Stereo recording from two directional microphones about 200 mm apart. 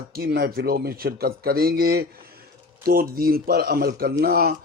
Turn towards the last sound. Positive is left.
turn(degrees=-50)  # may be behind; listen again after turning